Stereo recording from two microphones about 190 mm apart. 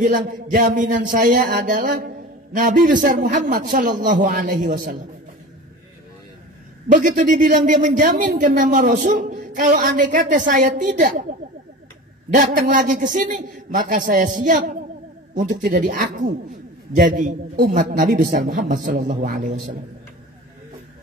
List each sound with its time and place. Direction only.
0.0 s a man's voice: 45° right (ahead or behind)
7.0 s a man's voice: 45° right (ahead or behind)
12.4 s a man's voice: 45° right (ahead or behind)
15.5 s speech: 65° right (ahead or behind)
15.8 s a man's voice: 45° right (ahead or behind)
17.6 s a man's voice: 55° right (ahead or behind)